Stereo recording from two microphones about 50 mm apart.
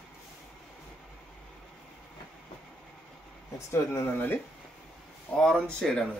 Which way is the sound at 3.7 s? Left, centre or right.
Left.